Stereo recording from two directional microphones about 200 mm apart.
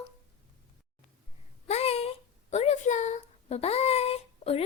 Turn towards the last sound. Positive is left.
turn(degrees=30)  # may be behind; listen again after turning